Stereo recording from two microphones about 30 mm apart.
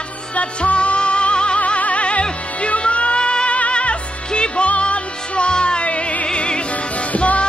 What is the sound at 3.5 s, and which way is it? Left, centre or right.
Music, left.